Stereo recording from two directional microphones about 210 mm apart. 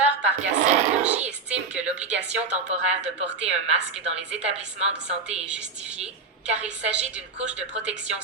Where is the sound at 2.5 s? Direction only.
35° right (ahead or behind).